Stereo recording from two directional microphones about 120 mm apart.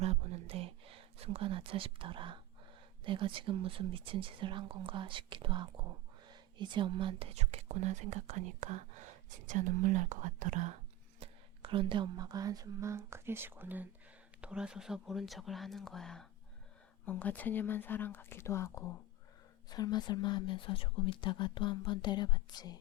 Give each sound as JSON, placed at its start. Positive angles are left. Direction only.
{"t": 0.0, "sound": "a sound", "side_deg": -55}
{"t": 3.0, "sound": "speech", "side_deg": -45}
{"t": 9.5, "sound": "speech", "side_deg": -90}
{"t": 11.2, "sound": "speech", "side_deg": -50}
{"t": 17.1, "sound": "speech", "side_deg": 15}
{"t": 19.7, "sound": "speech", "side_deg": 35}